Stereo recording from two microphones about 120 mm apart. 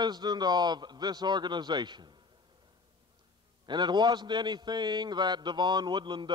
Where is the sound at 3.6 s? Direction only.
40° right (ahead or behind).